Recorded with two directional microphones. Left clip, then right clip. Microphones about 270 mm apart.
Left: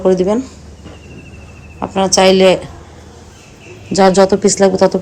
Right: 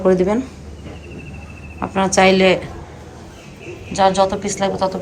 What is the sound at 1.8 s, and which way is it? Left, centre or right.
Speech, centre.